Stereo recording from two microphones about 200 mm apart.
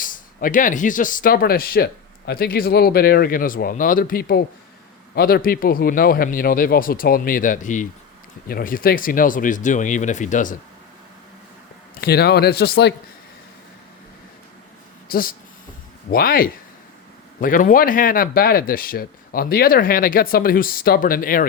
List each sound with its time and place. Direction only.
0.0 s speech: 45° left (ahead or behind)
11.9 s speech: 50° left (ahead or behind)
15.1 s speech: 45° left (ahead or behind)